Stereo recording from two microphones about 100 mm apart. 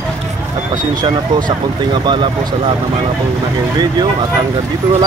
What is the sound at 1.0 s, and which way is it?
Speech, 45° right (ahead or behind).